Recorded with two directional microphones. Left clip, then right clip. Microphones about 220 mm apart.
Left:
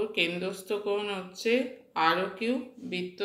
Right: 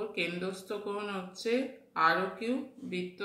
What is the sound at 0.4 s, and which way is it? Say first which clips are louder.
Speech: left 5 dB; 20° left (ahead or behind).